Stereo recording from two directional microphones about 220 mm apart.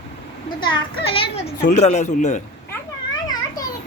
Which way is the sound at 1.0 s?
25° left (ahead or behind).